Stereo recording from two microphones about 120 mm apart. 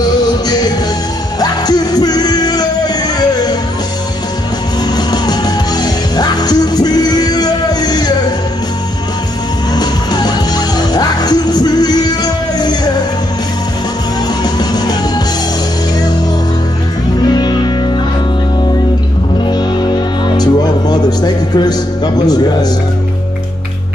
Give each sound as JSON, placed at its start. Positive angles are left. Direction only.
{"t": 0.2, "sound": "music", "side_deg": 35}
{"t": 4.9, "sound": "music", "side_deg": 35}
{"t": 9.8, "sound": "music", "side_deg": 35}
{"t": 14.4, "sound": "music", "side_deg": 35}
{"t": 17.2, "sound": "music", "side_deg": 35}
{"t": 19.5, "sound": "music", "side_deg": 40}